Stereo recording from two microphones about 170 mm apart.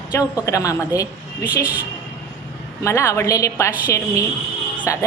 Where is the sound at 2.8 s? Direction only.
15° left (ahead or behind).